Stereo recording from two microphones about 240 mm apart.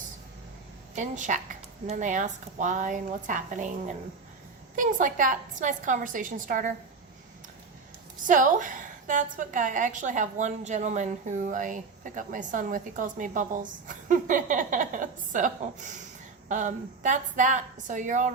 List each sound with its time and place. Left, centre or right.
0.9 s a woman's voice: right
8.3 s a woman's voice: right